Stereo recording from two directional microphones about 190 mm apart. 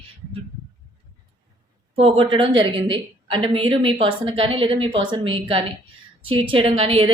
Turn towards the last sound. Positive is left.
turn(degrees=-30)  # may be behind; listen again after turning